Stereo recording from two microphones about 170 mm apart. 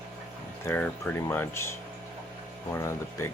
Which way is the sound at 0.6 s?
10° left (ahead or behind).